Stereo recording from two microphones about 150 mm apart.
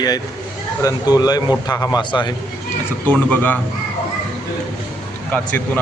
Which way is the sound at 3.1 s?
10° left (ahead or behind).